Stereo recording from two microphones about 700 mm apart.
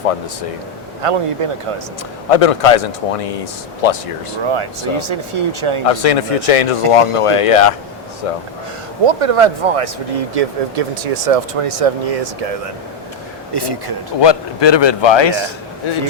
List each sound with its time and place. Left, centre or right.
1.0 s speech: right
2.3 s speech: left
4.4 s speech: right
5.9 s speech: left
9.0 s speech: right
13.5 s speech: right
14.2 s a man's voice: left